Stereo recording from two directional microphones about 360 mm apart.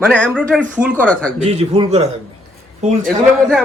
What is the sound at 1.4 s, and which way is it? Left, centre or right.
Speech, centre.